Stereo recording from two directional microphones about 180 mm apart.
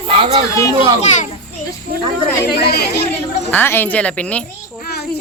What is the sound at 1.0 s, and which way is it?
Speech, 40° left (ahead or behind).